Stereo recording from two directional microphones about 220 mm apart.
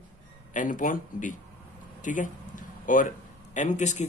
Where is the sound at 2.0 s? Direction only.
35° left (ahead or behind).